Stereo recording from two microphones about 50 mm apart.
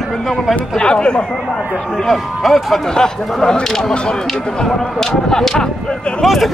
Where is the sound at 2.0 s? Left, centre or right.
Centre.